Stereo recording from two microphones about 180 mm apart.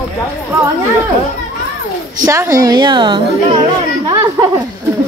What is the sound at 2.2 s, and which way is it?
Speech, 15° right (ahead or behind).